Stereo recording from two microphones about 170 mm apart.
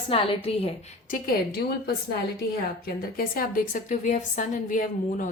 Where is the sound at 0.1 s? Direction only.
35° left (ahead or behind).